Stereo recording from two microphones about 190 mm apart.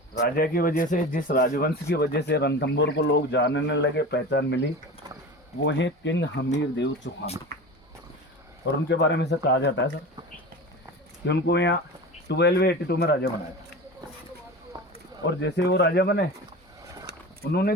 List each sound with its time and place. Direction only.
0.2 s speech: 50° left (ahead or behind)
5.6 s speech: 70° left (ahead or behind)
8.6 s speech: 65° left (ahead or behind)
11.3 s speech: 65° left (ahead or behind)
15.2 s speech: 65° left (ahead or behind)
17.1 s a sound: 60° right (ahead or behind)
17.5 s speech: 55° left (ahead or behind)